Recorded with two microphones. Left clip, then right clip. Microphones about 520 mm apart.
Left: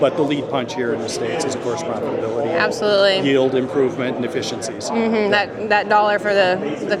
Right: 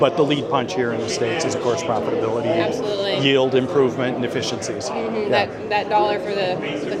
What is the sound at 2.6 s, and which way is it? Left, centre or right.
Speech, left.